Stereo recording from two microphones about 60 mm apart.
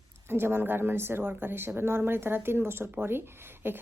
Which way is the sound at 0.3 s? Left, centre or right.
Right.